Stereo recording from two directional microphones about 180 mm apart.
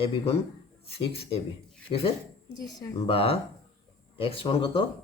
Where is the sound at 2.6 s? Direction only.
20° left (ahead or behind).